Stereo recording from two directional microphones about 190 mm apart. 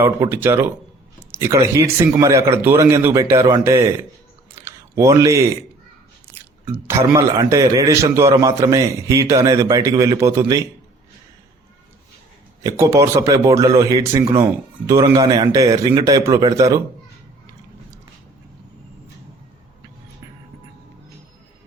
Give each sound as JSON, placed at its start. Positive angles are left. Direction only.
{"t": 0.0, "sound": "a man's voice", "side_deg": -10}
{"t": 4.6, "sound": "a sound", "side_deg": -15}
{"t": 6.8, "sound": "a man's voice", "side_deg": -15}
{"t": 12.6, "sound": "a man's voice", "side_deg": -15}